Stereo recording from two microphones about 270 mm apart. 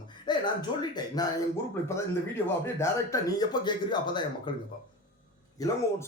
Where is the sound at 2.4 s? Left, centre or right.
Centre.